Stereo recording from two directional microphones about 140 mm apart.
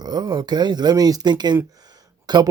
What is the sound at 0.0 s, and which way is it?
Speech, 30° right (ahead or behind).